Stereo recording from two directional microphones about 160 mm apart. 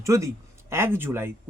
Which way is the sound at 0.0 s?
20° right (ahead or behind).